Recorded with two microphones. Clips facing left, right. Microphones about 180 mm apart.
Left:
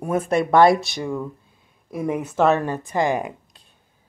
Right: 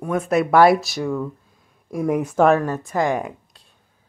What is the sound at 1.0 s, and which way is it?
Speech, 15° left (ahead or behind).